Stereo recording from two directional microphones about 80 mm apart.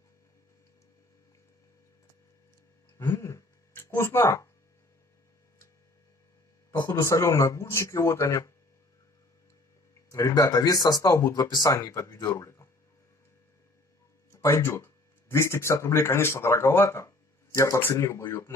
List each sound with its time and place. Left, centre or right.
3.0 s speech: left
6.8 s speech: left
10.1 s speech: left
12.4 s speech: left
14.3 s speech: left